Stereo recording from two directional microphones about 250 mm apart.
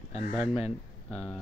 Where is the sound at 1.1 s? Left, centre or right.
Centre.